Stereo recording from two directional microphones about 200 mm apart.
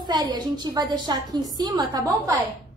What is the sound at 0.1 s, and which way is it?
A woman's voice, 20° right (ahead or behind).